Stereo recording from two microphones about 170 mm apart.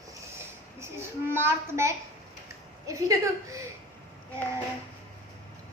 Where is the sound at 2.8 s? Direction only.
20° right (ahead or behind).